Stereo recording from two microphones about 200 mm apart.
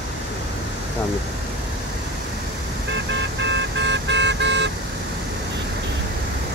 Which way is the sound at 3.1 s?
60° right (ahead or behind).